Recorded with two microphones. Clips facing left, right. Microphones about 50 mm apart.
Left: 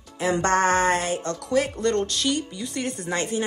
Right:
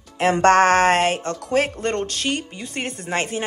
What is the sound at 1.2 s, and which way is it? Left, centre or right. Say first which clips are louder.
Speech: right 2 dB; right.